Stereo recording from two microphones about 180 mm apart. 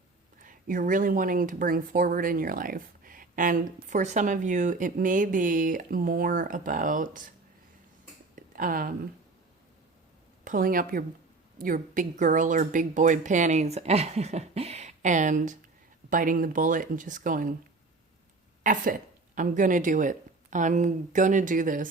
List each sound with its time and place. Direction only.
0.4 s speech: 50° right (ahead or behind)
8.4 s a sound: 50° right (ahead or behind)
10.4 s a woman's voice: 50° right (ahead or behind)
18.6 s speech: 45° right (ahead or behind)